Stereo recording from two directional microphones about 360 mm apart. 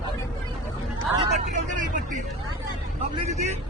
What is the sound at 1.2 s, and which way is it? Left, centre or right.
Speech, centre.